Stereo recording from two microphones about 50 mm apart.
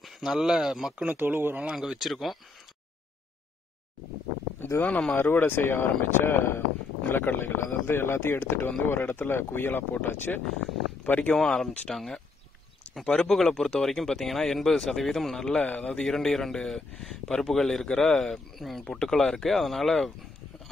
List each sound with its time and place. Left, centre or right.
0.0 s speech: centre
1.0 s speech: right
1.7 s speech: centre
4.6 s a sound: left
5.1 s speech: left
11.3 s speech: centre
13.2 s speech: centre
15.4 s speech: centre